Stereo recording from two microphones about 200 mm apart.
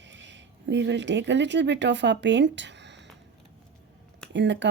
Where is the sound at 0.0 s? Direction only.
65° right (ahead or behind).